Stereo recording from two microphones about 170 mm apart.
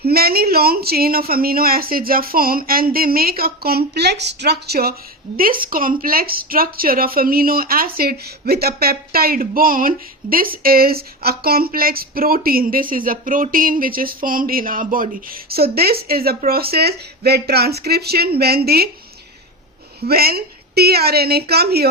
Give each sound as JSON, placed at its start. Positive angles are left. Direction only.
{"t": 0.0, "sound": "speech", "side_deg": -65}
{"t": 20.0, "sound": "speech", "side_deg": -65}